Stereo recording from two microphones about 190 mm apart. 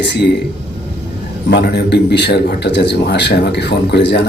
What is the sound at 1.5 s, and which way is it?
Speech, 60° left (ahead or behind).